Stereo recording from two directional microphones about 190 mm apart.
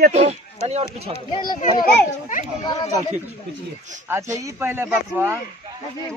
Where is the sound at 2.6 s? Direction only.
20° left (ahead or behind).